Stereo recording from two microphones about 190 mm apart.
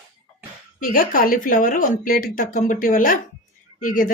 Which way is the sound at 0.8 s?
45° left (ahead or behind).